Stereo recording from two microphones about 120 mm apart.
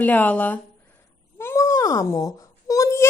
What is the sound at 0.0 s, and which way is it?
A child's voice, 15° left (ahead or behind).